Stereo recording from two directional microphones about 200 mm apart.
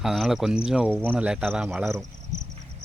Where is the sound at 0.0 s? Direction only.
Centre (ahead or behind).